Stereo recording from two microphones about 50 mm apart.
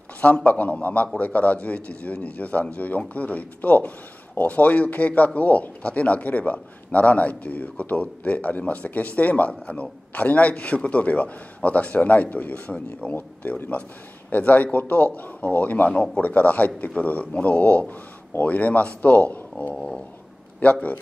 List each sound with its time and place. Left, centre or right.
0.2 s a man's voice: left
14.3 s a man's voice: left
19.7 s a sound: centre
20.6 s a man's voice: left